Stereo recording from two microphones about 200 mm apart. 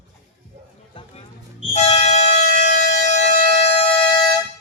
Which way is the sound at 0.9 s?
25° left (ahead or behind).